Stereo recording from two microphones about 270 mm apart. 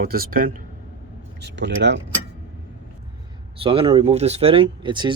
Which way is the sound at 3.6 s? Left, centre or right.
Centre.